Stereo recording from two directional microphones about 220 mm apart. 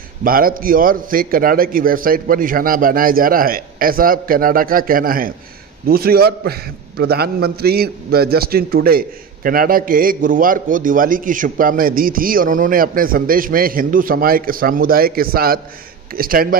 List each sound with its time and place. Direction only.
0.2 s a man's voice: 40° right (ahead or behind)